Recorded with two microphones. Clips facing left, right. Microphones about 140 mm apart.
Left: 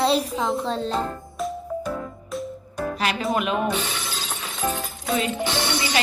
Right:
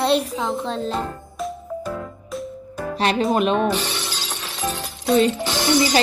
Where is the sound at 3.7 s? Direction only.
80° right.